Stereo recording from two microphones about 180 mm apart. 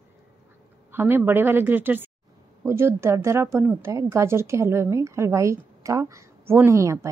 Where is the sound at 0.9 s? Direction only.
10° right (ahead or behind).